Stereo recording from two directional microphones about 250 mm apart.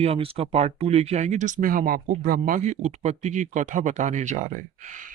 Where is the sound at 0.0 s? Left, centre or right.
Right.